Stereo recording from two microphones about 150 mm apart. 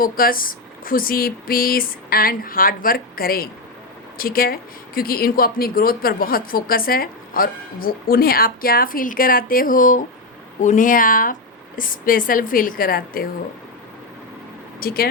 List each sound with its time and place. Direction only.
0.0 s speech: 75° left (ahead or behind)
14.8 s speech: 80° left